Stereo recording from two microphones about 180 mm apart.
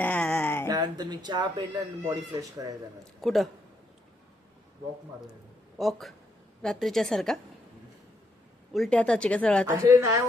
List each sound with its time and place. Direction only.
0.0 s a sound: 10° left (ahead or behind)
0.7 s speech: 20° right (ahead or behind)
3.0 s speech: centre (ahead or behind)
5.7 s a man's voice: centre (ahead or behind)
8.7 s speech: 5° left (ahead or behind)
9.6 s a woman's voice: 15° right (ahead or behind)